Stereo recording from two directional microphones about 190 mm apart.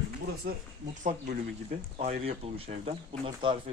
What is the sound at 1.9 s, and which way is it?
Speech, 30° right (ahead or behind).